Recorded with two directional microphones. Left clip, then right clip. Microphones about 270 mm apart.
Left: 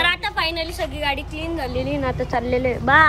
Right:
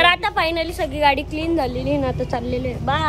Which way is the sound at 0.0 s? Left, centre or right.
Centre.